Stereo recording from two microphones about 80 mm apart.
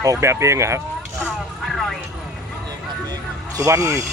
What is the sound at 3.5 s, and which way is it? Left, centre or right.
Speech, right.